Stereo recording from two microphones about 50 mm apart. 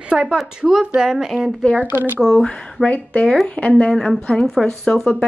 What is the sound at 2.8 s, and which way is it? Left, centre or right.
Speech, left.